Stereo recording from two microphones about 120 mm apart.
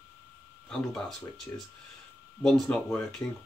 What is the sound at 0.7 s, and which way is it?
Speech, centre (ahead or behind).